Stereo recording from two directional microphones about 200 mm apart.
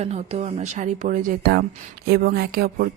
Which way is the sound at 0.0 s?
30° right (ahead or behind).